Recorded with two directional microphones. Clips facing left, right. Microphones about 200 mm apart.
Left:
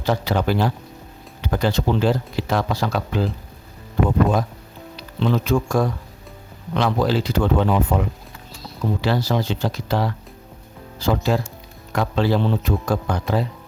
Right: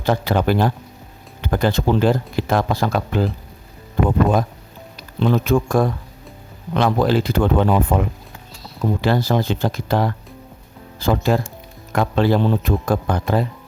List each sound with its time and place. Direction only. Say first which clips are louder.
0.0 s speech: right 2 dB; 55° right (ahead or behind)
4.9 s speech: right 3 dB; 50° right (ahead or behind)